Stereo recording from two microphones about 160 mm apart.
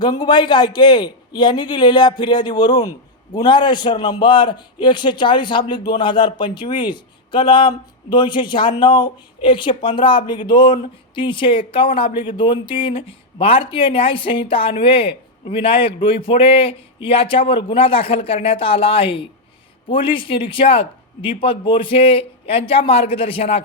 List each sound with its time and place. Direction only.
0.0 s a man's voice: 25° left (ahead or behind)